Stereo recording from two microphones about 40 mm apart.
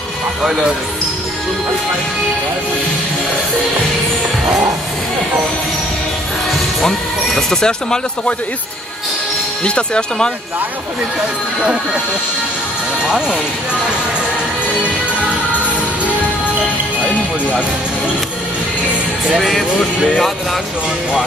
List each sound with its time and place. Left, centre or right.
0.4 s speech: centre
6.8 s speech: centre
9.7 s speech: left
11.6 s speech: right
13.0 s speech: centre
17.0 s music: left
19.3 s speech: centre